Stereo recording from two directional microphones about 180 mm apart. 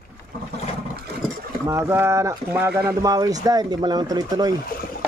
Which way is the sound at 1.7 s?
15° right (ahead or behind).